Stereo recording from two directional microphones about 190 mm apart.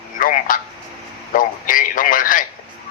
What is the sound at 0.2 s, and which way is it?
A man's voice, 45° left (ahead or behind).